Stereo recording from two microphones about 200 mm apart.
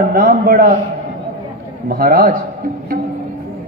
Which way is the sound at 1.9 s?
45° right (ahead or behind).